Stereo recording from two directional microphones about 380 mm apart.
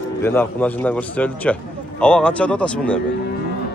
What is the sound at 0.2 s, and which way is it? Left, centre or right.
A man's voice, centre.